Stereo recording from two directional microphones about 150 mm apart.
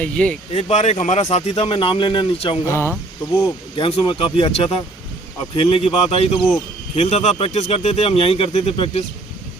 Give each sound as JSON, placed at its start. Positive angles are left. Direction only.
{"t": 0.0, "sound": "speech", "side_deg": 10}
{"t": 0.5, "sound": "speech", "side_deg": 50}
{"t": 2.6, "sound": "speech", "side_deg": 15}
{"t": 3.8, "sound": "speech", "side_deg": 35}